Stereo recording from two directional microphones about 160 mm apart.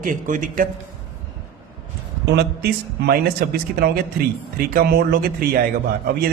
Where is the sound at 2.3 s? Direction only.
85° right; by 5.6 s 70° right (ahead or behind).